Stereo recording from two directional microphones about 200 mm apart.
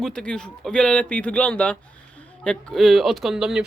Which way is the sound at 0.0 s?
5° left (ahead or behind).